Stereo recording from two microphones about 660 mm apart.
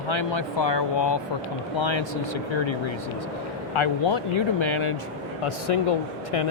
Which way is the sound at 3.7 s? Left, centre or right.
Left.